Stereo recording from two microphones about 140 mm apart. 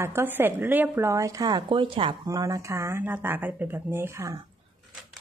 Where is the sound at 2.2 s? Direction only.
25° right (ahead or behind).